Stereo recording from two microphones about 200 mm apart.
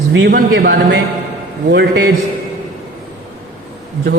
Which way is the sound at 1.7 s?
55° right (ahead or behind).